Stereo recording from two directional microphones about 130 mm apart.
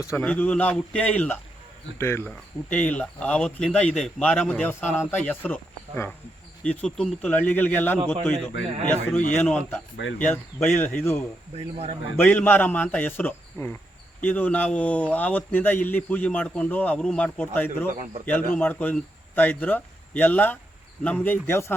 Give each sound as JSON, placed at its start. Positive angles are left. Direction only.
{"t": 0.0, "sound": "speech", "side_deg": 20}
{"t": 0.3, "sound": "a man's voice", "side_deg": 10}
{"t": 6.7, "sound": "a man's voice", "side_deg": 5}
{"t": 7.9, "sound": "a man's voice", "side_deg": -35}
{"t": 8.8, "sound": "a man's voice", "side_deg": 15}